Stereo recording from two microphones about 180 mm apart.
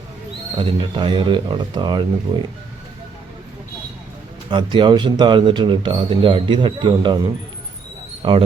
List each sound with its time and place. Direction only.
0.5 s speech: 30° right (ahead or behind)
4.4 s speech: 25° right (ahead or behind)
8.2 s speech: 30° right (ahead or behind)